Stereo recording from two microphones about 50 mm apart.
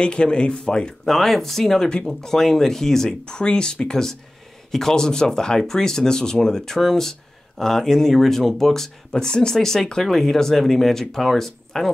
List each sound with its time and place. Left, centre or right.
0.0 s speech: centre
1.1 s speech: centre